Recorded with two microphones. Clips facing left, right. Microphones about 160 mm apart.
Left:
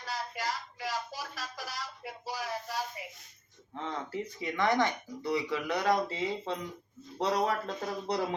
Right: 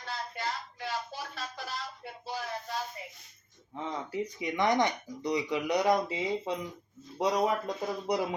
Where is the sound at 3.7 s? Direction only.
15° right (ahead or behind).